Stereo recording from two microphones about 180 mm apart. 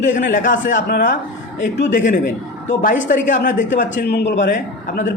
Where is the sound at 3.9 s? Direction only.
65° left (ahead or behind).